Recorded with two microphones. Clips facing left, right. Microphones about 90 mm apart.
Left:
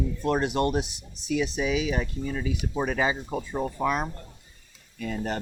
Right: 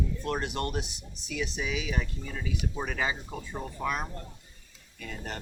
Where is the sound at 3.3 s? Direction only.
50° left (ahead or behind).